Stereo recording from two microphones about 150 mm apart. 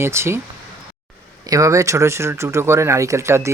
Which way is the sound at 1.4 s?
25° right (ahead or behind).